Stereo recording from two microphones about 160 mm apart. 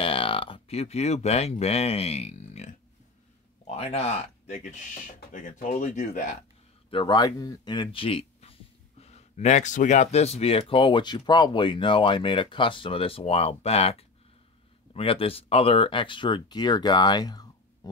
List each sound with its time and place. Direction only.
0.0 s speech: 35° left (ahead or behind); by 6.2 s 50° left (ahead or behind)
6.9 s speech: 30° left (ahead or behind)